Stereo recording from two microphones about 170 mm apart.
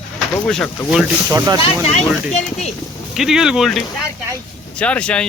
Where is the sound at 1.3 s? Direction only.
15° right (ahead or behind).